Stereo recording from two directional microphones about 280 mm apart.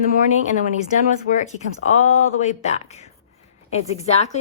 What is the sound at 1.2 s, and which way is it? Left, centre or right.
A woman's voice, left.